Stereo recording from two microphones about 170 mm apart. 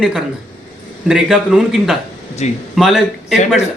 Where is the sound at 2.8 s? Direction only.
Centre (ahead or behind).